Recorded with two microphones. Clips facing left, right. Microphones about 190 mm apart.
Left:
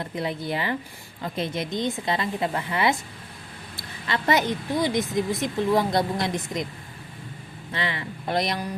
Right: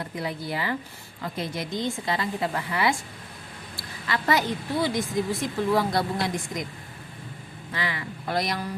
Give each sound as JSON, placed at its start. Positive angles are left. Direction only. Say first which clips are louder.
{"t": 0.0, "sound": "a woman's voice", "louder": "left 3 dB", "side_deg": 25}
{"t": 7.7, "sound": "a woman's voice", "louder": "left 2 dB", "side_deg": 25}